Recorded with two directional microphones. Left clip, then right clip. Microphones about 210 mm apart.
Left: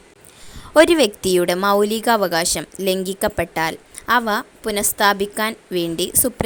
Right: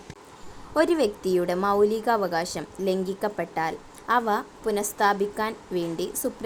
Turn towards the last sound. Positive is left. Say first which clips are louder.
# left 7 dB
turn(degrees=50)  # may be behind; listen again after turning